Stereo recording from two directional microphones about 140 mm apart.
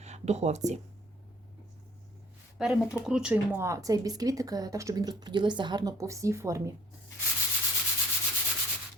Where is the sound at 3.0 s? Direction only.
5° right (ahead or behind).